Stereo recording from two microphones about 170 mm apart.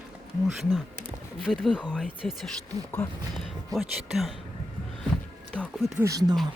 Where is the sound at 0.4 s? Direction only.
Centre (ahead or behind).